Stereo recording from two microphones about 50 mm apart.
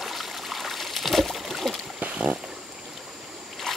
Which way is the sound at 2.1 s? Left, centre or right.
Right.